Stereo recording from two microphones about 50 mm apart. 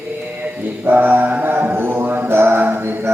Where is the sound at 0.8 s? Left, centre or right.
Right.